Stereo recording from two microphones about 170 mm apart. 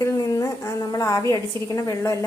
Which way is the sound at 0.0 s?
20° left (ahead or behind).